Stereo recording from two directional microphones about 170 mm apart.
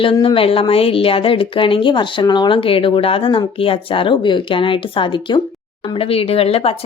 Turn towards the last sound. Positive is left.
turn(degrees=35)  # may be behind; listen again after turning